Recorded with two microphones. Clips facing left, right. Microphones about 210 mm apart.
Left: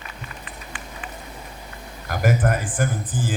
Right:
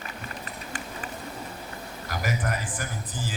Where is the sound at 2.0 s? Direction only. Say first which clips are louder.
Left 8 dB; 50° left (ahead or behind).